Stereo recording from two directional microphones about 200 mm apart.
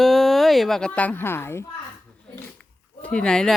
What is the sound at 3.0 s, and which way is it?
Speech, 5° left (ahead or behind).